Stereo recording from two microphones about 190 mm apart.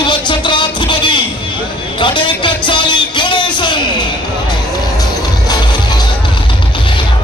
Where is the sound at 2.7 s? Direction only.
25° left (ahead or behind).